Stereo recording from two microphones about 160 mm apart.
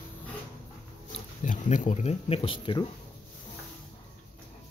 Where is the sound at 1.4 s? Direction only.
50° left (ahead or behind); by 2.8 s 30° left (ahead or behind).